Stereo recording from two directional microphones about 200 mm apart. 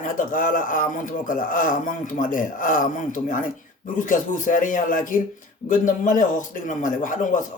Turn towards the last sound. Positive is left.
turn(degrees=40)  # may be behind; listen again after turning